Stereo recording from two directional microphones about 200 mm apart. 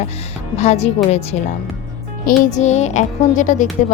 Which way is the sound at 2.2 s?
35° left (ahead or behind).